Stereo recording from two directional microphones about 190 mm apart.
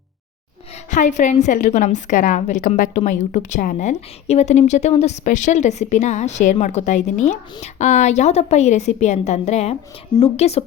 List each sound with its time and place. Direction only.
0.9 s a woman's voice: 40° left (ahead or behind)